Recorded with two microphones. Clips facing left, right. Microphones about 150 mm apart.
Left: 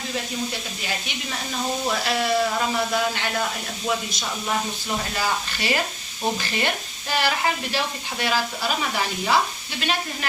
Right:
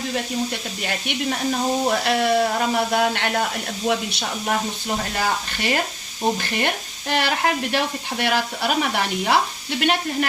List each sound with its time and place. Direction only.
0.9 s speech: 55° right (ahead or behind)
5.1 s speech: 50° right (ahead or behind)